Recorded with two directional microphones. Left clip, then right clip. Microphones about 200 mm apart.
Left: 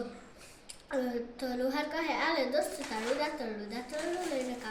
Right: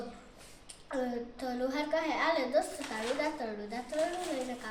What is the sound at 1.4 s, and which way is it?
A woman's voice, 15° right (ahead or behind).